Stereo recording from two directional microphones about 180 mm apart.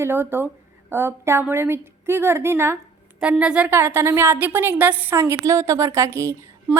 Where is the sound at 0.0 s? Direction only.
10° right (ahead or behind).